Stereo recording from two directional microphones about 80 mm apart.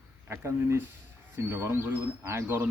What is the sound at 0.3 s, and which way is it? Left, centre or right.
Speech, right.